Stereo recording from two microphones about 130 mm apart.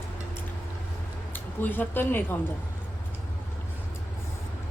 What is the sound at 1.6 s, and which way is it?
Speech, 15° left (ahead or behind).